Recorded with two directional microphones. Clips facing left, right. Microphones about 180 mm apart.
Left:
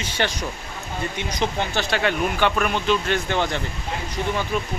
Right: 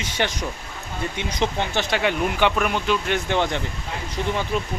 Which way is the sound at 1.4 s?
15° right (ahead or behind).